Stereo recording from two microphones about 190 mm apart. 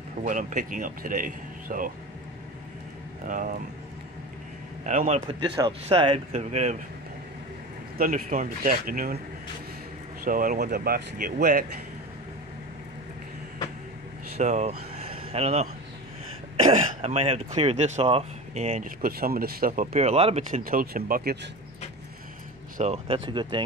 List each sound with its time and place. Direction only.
0.2 s a man's voice: 45° right (ahead or behind)
3.3 s a man's voice: 45° right (ahead or behind)
4.8 s speech: 40° right (ahead or behind)
5.6 s speech: 30° right (ahead or behind)
8.0 s a man's voice: 45° right (ahead or behind)
10.2 s a man's voice: 45° right (ahead or behind)
14.4 s speech: 40° right (ahead or behind)
16.7 s speech: 35° right (ahead or behind)
20.6 s a man's voice: 50° right (ahead or behind)
22.8 s speech: 30° right (ahead or behind)